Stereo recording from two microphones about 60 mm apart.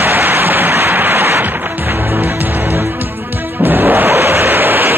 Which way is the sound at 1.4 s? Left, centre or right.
Right.